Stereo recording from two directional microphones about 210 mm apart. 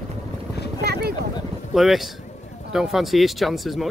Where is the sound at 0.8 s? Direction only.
50° right (ahead or behind).